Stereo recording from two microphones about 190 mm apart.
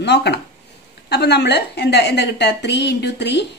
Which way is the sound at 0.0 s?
65° left (ahead or behind).